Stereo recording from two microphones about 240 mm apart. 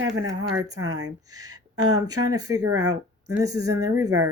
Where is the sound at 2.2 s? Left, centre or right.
Centre.